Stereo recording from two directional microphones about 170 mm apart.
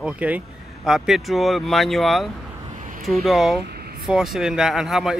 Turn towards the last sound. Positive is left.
turn(degrees=0)  # may be behind; listen again after turning